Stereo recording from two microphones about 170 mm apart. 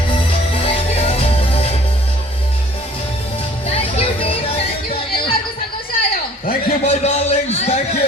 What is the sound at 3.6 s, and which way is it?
Music, 35° left (ahead or behind).